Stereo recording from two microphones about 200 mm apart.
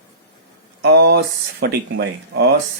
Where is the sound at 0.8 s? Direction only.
55° right (ahead or behind).